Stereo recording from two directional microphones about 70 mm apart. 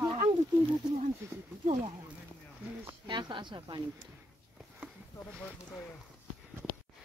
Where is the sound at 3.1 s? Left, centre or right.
Right.